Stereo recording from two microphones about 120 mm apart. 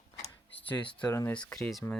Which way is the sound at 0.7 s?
35° left (ahead or behind).